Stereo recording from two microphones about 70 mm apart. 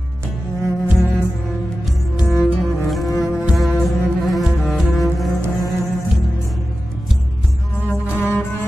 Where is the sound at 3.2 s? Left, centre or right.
Centre.